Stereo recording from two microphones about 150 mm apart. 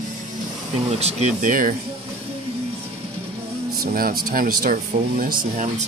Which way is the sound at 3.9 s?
75° right (ahead or behind).